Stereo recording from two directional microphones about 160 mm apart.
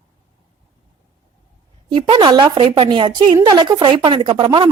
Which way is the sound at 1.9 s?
30° right (ahead or behind).